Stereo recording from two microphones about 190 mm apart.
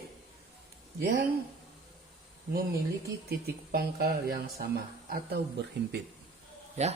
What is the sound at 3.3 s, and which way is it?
Speech, 55° right (ahead or behind).